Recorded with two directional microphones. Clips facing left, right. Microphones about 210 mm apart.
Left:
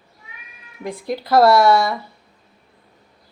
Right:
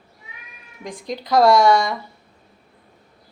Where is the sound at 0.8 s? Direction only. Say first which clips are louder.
Left 4 dB; 10° left (ahead or behind).